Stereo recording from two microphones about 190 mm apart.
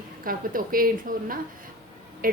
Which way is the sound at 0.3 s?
50° right (ahead or behind).